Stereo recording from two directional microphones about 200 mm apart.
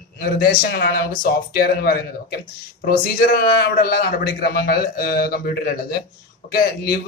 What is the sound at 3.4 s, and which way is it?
A man's voice, 50° left (ahead or behind).